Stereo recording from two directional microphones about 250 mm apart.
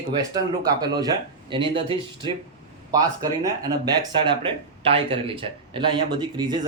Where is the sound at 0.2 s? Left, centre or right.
Centre.